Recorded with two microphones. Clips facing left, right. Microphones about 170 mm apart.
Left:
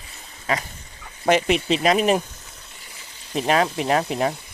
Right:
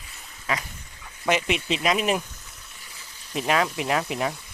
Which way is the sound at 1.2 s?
35° left (ahead or behind).